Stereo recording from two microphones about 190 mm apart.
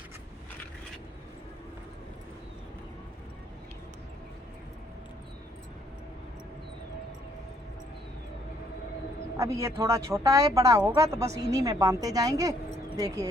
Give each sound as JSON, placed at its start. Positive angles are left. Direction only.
{"t": 9.4, "sound": "a woman's voice", "side_deg": -15}